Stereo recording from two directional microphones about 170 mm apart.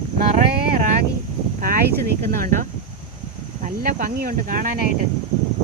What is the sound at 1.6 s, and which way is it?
Speech, 60° right (ahead or behind).